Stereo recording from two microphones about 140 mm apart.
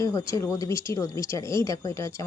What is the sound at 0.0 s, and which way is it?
Speech, 20° left (ahead or behind).